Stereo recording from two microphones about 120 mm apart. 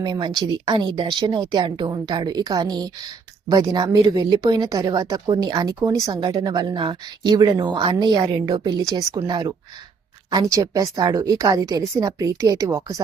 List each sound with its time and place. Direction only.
0.0 s a woman's voice: 40° right (ahead or behind)